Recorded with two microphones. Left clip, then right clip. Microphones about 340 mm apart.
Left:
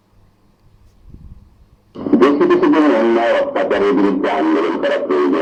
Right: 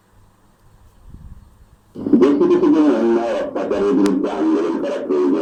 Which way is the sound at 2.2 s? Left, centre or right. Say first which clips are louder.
Left 2 dB; left.